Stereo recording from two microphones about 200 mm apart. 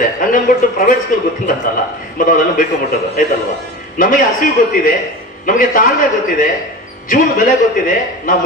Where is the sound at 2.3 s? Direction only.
45° left (ahead or behind).